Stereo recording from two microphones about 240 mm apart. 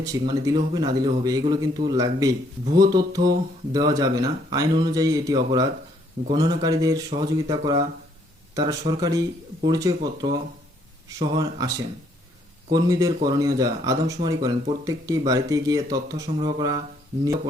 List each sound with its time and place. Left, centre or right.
0.0 s speech: centre
12.7 s speech: centre